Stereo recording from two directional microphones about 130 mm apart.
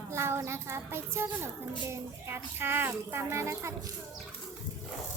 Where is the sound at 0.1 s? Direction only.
20° right (ahead or behind).